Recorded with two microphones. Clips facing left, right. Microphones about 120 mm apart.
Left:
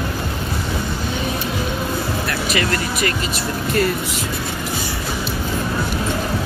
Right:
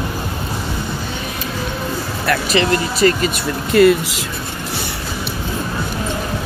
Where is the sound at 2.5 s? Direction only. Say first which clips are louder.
Right 3 dB; 30° right (ahead or behind).